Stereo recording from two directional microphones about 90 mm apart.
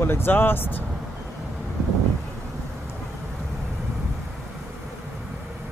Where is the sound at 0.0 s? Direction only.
25° left (ahead or behind).